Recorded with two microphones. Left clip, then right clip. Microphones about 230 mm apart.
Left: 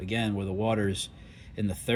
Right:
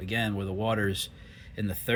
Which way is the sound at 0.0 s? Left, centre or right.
Right.